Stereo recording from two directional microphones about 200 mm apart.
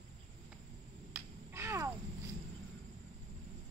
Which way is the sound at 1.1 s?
15° right (ahead or behind).